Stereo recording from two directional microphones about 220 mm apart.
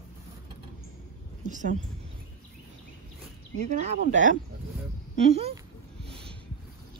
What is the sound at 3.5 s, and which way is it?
Speech, 30° right (ahead or behind).